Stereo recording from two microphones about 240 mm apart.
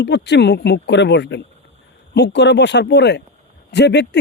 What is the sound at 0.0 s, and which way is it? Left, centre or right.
Speech, left.